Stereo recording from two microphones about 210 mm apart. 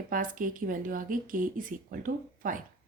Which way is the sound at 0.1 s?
40° right (ahead or behind).